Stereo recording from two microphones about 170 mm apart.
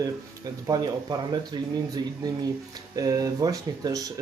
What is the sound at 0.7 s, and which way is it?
Speech, 25° right (ahead or behind).